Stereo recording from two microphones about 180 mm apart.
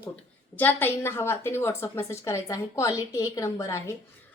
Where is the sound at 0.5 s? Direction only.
10° left (ahead or behind).